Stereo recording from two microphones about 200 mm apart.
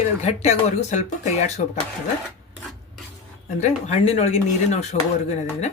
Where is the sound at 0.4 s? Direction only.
35° left (ahead or behind).